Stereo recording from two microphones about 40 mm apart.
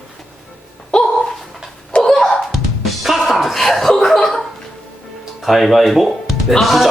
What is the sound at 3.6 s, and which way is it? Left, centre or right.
Chuckle, centre.